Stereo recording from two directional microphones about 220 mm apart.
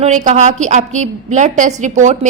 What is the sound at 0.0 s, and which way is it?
A woman's voice, 35° right (ahead or behind).